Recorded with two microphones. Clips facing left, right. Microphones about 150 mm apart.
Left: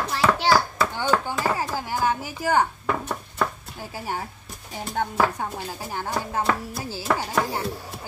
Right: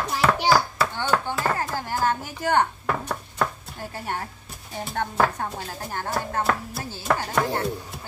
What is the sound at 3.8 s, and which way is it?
Speech, 5° left (ahead or behind).